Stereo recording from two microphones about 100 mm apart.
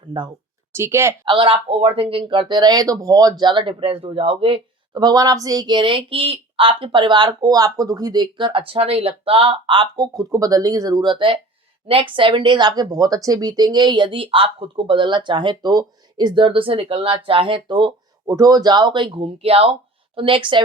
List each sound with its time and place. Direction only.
0.7 s speech: 25° right (ahead or behind)
1.2 s speech: 55° right (ahead or behind)
4.9 s speech: 40° right (ahead or behind); by 9.9 s 60° right (ahead or behind)
9.9 s speech: 40° right (ahead or behind)
18.3 s speech: 40° right (ahead or behind); by 19.7 s 80° right
20.1 s speech: 60° right (ahead or behind)